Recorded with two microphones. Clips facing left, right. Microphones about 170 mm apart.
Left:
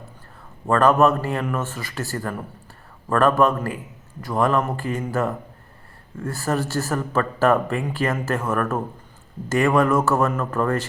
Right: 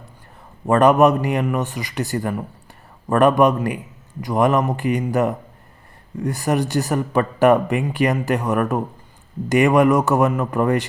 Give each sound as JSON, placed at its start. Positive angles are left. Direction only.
{"t": 0.7, "sound": "speech", "side_deg": -20}